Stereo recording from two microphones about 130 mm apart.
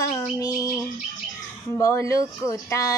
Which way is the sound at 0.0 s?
25° left (ahead or behind).